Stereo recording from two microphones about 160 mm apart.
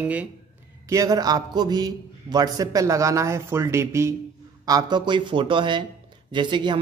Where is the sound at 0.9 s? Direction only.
20° right (ahead or behind).